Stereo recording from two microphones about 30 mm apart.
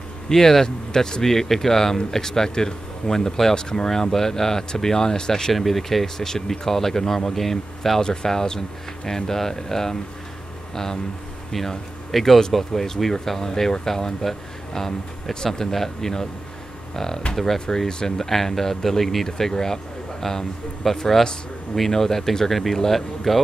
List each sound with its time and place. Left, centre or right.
0.3 s speech: centre
5.5 s speech: centre
6.1 s speech: centre
7.3 s speech: centre
8.0 s speech: left
12.1 s speech: centre
12.5 s speech: centre
18.3 s speech: centre